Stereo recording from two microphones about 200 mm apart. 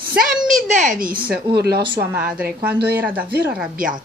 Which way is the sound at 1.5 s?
55° right (ahead or behind).